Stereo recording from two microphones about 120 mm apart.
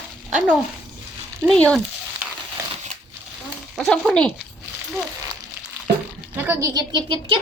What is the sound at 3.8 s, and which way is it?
Speech, 5° left (ahead or behind).